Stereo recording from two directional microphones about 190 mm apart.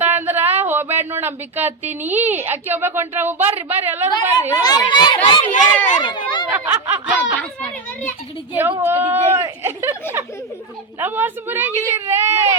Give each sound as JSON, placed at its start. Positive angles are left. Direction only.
{"t": 0.0, "sound": "speech", "side_deg": -10}
{"t": 4.6, "sound": "speech", "side_deg": 20}
{"t": 6.0, "sound": "a sound", "side_deg": 25}
{"t": 6.5, "sound": "snicker", "side_deg": -10}
{"t": 7.3, "sound": "children playing", "side_deg": 5}
{"t": 8.8, "sound": "speech", "side_deg": -10}